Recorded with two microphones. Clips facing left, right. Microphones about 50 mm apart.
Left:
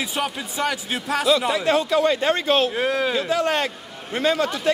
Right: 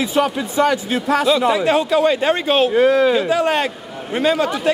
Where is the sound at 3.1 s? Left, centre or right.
Centre.